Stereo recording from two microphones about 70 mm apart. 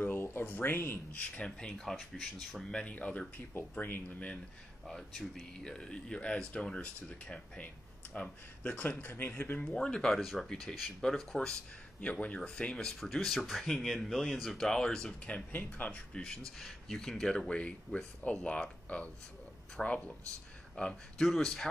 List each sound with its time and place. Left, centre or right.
0.0 s a sound: left
1.1 s speech: left
1.9 s speech: centre
2.7 s speech: centre
4.8 s speech: centre; by 9.6 s left
9.6 s speech: centre
15.3 s speech: left; by 21.6 s centre